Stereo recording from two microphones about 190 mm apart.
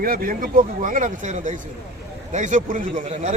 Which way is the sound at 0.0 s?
50° right (ahead or behind).